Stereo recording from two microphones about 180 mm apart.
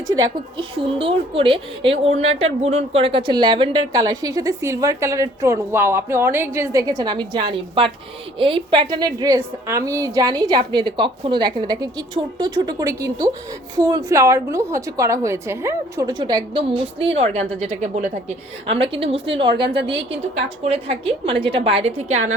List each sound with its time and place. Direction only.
0.1 s a woman's voice: 25° right (ahead or behind)
19.6 s a woman's voice: 70° right (ahead or behind)
20.1 s a woman's voice: 35° right (ahead or behind)